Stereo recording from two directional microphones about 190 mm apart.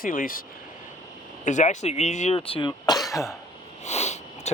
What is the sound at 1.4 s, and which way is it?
Speech, 40° left (ahead or behind).